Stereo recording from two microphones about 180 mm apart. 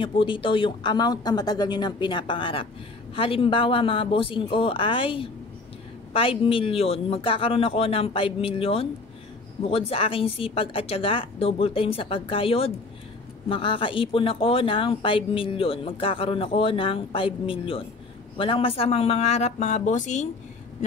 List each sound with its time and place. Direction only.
0.0 s speech: 30° left (ahead or behind)